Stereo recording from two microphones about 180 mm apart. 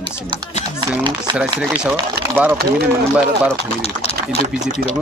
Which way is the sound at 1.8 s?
10° right (ahead or behind).